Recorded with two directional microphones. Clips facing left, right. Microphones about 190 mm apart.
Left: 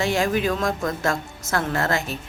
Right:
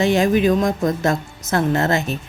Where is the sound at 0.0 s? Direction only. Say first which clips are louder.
Right 6 dB; 20° right (ahead or behind).